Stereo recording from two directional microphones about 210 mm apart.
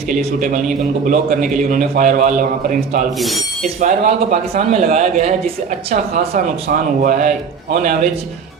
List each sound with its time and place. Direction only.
0.1 s a man's voice: 40° right (ahead or behind)
3.2 s speech: centre (ahead or behind)
3.8 s a man's voice: 35° right (ahead or behind)